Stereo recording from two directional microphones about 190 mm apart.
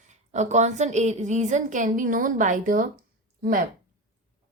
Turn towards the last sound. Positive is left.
turn(degrees=-50)  # may be behind; listen again after turning